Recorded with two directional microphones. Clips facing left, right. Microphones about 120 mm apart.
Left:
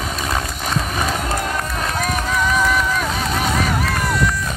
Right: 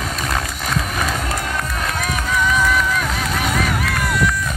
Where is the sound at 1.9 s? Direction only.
35° left (ahead or behind).